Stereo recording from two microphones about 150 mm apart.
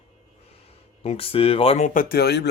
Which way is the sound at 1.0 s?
40° left (ahead or behind).